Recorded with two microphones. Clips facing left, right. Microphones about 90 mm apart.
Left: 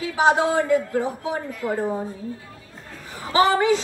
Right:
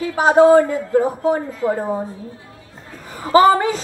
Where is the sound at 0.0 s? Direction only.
40° right (ahead or behind).